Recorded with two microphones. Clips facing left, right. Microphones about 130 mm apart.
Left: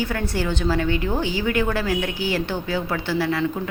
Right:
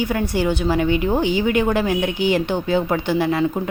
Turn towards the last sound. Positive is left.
turn(degrees=-20)  # may be behind; listen again after turning